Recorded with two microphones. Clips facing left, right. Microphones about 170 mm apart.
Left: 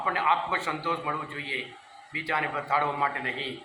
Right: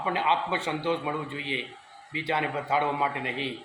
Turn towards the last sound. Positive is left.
turn(degrees=-20)  # may be behind; listen again after turning